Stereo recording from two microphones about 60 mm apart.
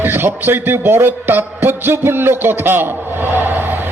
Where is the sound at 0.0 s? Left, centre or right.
Right.